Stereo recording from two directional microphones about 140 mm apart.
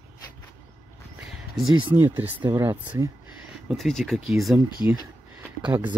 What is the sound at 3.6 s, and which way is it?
Speech, centre (ahead or behind).